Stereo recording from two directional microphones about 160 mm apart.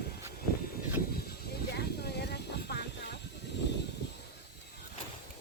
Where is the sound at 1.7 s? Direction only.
90° left.